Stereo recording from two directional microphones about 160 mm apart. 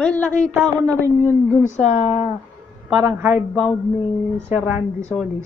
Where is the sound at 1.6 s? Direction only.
45° left (ahead or behind).